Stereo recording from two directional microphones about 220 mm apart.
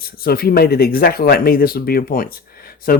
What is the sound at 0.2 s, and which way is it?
Speech, 45° left (ahead or behind).